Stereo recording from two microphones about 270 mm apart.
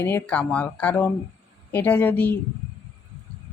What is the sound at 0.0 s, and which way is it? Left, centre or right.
Speech, centre.